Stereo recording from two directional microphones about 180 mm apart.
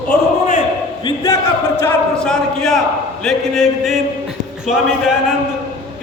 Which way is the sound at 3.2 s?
Centre (ahead or behind).